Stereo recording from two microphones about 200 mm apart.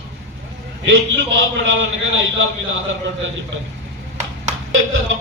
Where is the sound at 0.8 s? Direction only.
70° right (ahead or behind).